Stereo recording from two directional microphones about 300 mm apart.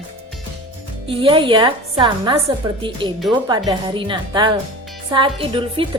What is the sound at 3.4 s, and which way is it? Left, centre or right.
A woman's voice, centre.